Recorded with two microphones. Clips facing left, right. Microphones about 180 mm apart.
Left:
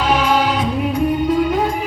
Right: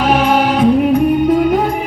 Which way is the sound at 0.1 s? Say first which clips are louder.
Right 3 dB; 55° right (ahead or behind).